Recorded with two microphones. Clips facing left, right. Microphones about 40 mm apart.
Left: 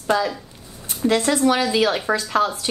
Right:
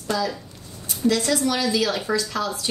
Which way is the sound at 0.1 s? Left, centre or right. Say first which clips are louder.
Left 3 dB; left.